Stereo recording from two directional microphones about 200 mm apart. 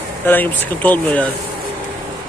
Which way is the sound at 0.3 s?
10° left (ahead or behind).